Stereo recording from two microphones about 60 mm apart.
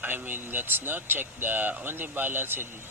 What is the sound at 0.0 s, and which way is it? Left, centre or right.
Speech, right.